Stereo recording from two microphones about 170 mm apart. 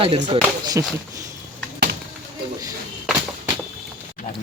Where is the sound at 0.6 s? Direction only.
20° right (ahead or behind).